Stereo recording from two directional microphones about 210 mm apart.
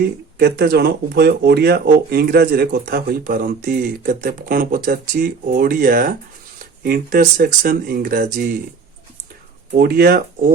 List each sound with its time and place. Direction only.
0.0 s speech: 50° right (ahead or behind)
9.7 s speech: 45° right (ahead or behind)